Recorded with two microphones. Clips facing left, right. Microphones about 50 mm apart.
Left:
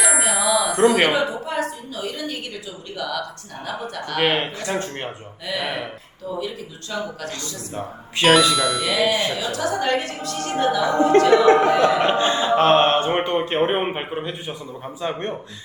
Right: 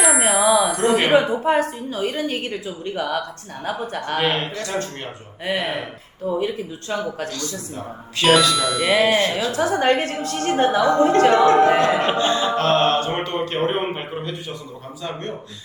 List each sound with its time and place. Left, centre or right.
0.0 s music: centre
0.3 s a sound: centre
1.1 s a woman's voice: right
4.2 s speech: left
5.5 s a woman's voice: right
8.2 s speech: centre
9.0 s speech: right
9.5 s a woman's voice: right
12.3 s speech: left